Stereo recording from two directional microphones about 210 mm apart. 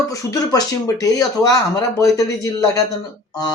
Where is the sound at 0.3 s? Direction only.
15° left (ahead or behind).